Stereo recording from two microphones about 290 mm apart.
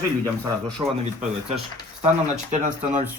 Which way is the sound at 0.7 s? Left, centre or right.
Centre.